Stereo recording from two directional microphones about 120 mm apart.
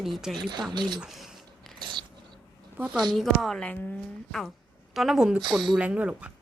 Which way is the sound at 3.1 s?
Centre (ahead or behind).